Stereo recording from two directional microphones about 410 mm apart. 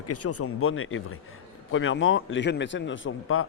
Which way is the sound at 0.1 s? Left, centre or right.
Left.